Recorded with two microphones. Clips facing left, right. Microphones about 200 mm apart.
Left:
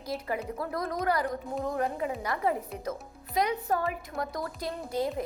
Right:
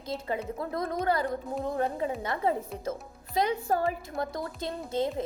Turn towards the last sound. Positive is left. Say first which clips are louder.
# right 1 dB
turn(degrees=-25)  # may be behind; listen again after turning